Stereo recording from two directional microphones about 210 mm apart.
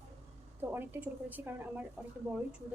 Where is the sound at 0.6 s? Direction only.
10° right (ahead or behind).